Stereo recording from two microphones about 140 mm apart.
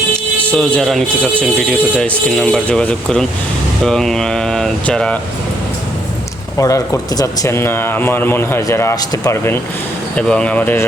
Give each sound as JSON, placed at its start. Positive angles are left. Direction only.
{"t": 0.4, "sound": "speech", "side_deg": 5}
{"t": 6.6, "sound": "speech", "side_deg": 25}
{"t": 10.2, "sound": "speech", "side_deg": 10}